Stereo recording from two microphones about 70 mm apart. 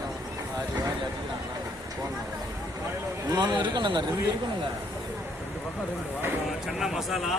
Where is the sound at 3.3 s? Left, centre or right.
Right.